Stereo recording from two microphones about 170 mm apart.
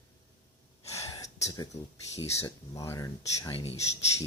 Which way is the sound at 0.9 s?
20° left (ahead or behind).